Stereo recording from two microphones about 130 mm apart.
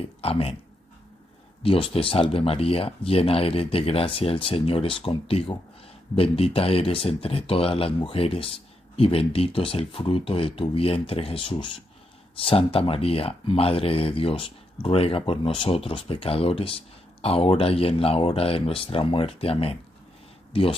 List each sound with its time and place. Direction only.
0.0 s speech: 50° left (ahead or behind)
1.6 s speech: 45° left (ahead or behind)